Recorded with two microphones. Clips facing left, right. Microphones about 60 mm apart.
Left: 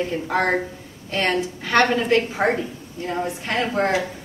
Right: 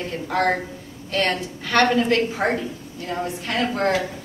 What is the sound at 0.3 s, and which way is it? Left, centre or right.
A woman's voice, centre.